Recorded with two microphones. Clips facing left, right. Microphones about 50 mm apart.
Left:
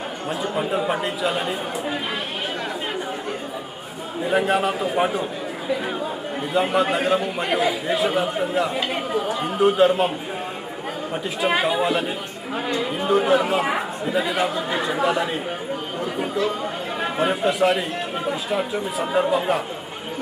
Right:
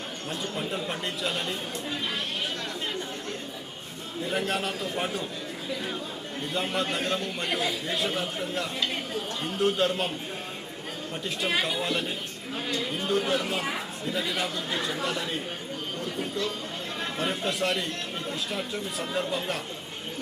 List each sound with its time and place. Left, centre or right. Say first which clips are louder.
0.3 s speech: left 8 dB; centre
4.2 s speech: left 9 dB; centre
5.6 s speech: left 9 dB; left
6.5 s speech: left 9 dB; centre
11.1 s speech: left 7 dB; centre
12.5 s speech: left 7 dB; left
13.0 s speech: left 9 dB; centre
17.0 s speech: left 9 dB; centre